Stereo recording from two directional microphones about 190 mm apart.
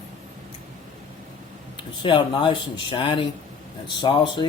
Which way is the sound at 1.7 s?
25° left (ahead or behind).